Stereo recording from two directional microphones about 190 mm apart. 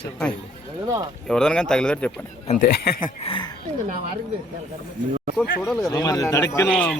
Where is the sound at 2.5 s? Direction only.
50° left (ahead or behind).